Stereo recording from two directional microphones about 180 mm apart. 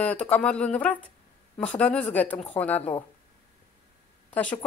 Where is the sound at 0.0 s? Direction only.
10° left (ahead or behind).